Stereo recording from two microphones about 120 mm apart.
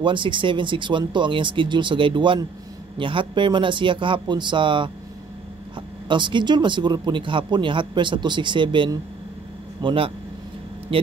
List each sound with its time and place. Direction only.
0.0 s speech: 45° right (ahead or behind)